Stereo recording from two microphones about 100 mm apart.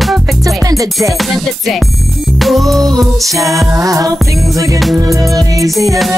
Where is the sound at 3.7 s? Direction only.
35° right (ahead or behind).